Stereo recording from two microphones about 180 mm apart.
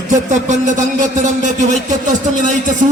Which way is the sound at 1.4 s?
40° right (ahead or behind).